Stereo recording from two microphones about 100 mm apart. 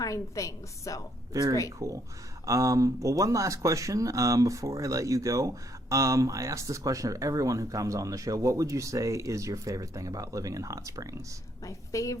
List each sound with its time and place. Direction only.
0.0 s a woman's voice: 35° left (ahead or behind)
1.3 s speech: 35° right (ahead or behind)
11.6 s a woman's voice: 35° left (ahead or behind)